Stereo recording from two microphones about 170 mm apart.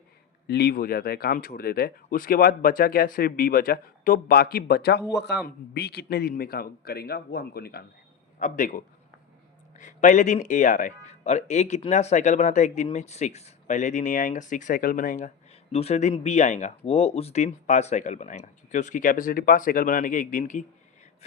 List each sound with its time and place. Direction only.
0.4 s speech: 70° left (ahead or behind)
5.1 s a man's voice: 80° left
5.7 s a man's voice: 70° left (ahead or behind)
8.4 s speech: 50° left (ahead or behind)
15.7 s speech: 40° left (ahead or behind)